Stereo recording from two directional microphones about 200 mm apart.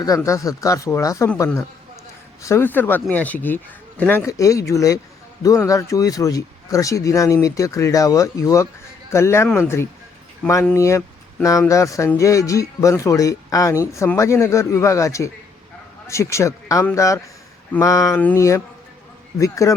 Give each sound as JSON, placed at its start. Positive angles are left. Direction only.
{"t": 0.0, "sound": "speech", "side_deg": 15}